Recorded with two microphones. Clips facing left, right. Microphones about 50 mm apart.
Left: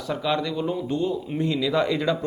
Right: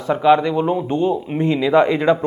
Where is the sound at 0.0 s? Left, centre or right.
Right.